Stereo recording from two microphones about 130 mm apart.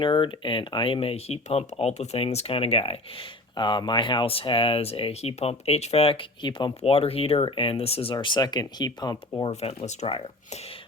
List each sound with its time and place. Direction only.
0.0 s speech: 40° left (ahead or behind)
6.9 s speech: 50° left (ahead or behind)
8.1 s speech: 35° left (ahead or behind)
9.5 s speech: 55° left (ahead or behind)
10.1 s speech: 45° left (ahead or behind)